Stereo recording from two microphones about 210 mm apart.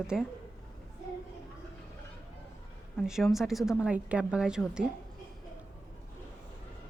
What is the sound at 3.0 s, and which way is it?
A woman's voice, centre (ahead or behind).